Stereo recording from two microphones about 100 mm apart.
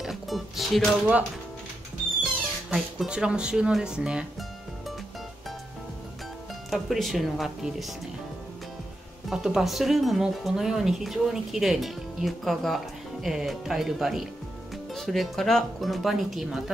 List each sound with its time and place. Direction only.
0.0 s music: centre (ahead or behind)
2.2 s music: 5° right (ahead or behind)
6.7 s speech: centre (ahead or behind)
9.3 s speech: 5° right (ahead or behind)